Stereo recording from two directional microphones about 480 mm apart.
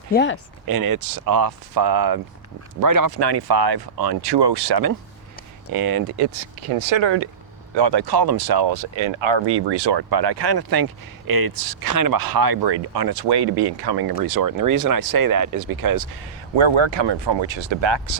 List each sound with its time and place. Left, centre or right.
0.1 s speech: left
0.7 s speech: right
6.2 s speech: right
16.6 s speech: right